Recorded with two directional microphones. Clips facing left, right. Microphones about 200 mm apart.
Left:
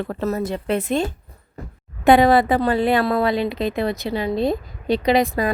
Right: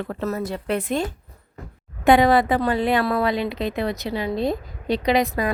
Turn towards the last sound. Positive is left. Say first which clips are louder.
# left 2 dB
turn(degrees=30)  # may be behind; listen again after turning